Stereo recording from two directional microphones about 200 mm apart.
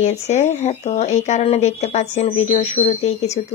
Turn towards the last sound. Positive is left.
turn(degrees=35)  # may be behind; listen again after turning